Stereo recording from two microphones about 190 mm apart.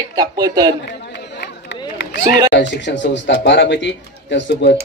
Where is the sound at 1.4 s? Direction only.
65° left (ahead or behind).